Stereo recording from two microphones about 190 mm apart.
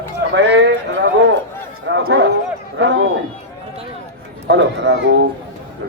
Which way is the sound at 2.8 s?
70° right (ahead or behind).